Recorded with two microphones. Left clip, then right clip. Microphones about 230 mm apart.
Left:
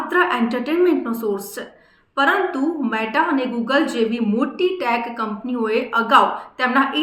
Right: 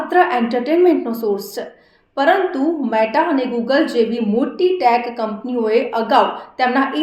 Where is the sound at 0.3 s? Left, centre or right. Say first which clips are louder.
Right 3 dB; centre.